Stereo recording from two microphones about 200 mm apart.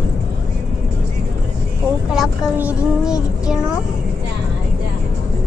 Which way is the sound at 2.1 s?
Centre (ahead or behind).